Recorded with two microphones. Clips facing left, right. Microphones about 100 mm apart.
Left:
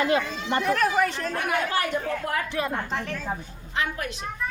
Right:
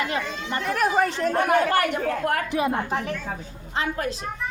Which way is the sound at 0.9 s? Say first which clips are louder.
Right 2 dB; 30° right (ahead or behind).